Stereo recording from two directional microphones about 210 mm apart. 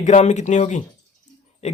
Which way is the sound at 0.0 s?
35° left (ahead or behind).